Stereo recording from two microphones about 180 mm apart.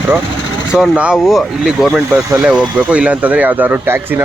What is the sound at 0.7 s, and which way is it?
Speech, 5° right (ahead or behind).